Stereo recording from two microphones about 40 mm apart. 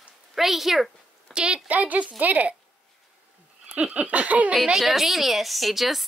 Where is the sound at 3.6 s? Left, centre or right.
Right.